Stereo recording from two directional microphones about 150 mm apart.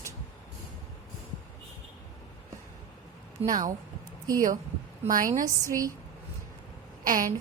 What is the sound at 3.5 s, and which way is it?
Speech, 60° right (ahead or behind).